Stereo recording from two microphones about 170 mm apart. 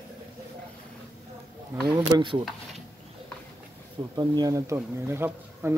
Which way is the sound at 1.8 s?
25° right (ahead or behind).